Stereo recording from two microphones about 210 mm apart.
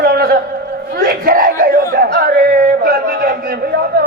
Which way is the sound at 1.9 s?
45° right (ahead or behind).